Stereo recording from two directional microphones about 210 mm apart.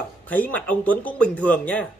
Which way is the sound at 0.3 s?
10° left (ahead or behind).